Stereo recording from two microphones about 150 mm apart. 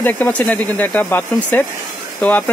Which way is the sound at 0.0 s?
10° left (ahead or behind).